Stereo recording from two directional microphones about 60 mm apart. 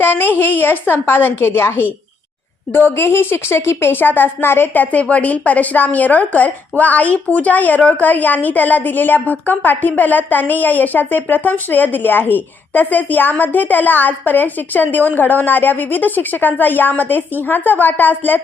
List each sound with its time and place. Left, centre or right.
0.0 s a woman's voice: left